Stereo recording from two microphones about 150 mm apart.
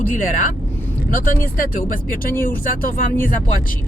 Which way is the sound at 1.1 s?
65° left (ahead or behind).